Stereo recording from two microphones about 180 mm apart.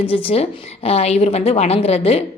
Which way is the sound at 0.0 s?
30° left (ahead or behind).